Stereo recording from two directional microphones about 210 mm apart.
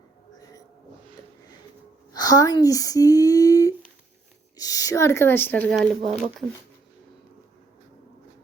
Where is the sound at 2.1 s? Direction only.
20° left (ahead or behind).